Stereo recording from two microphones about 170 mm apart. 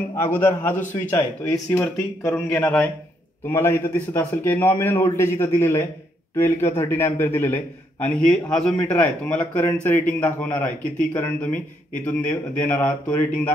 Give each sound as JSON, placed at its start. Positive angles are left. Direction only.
{"t": 0.1, "sound": "a man's voice", "side_deg": 15}